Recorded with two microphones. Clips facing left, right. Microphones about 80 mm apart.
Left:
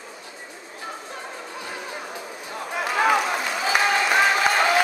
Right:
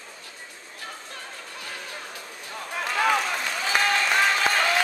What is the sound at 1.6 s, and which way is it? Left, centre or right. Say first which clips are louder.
Music: left 3 dB; centre.